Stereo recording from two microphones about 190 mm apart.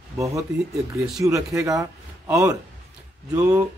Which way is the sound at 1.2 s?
15° right (ahead or behind).